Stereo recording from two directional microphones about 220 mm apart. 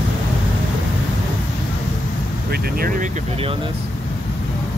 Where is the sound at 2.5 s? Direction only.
45° right (ahead or behind); by 3.7 s 25° right (ahead or behind).